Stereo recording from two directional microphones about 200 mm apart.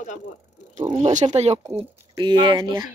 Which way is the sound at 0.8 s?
30° right (ahead or behind).